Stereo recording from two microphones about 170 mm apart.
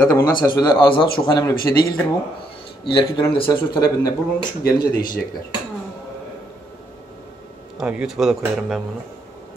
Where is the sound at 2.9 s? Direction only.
30° left (ahead or behind).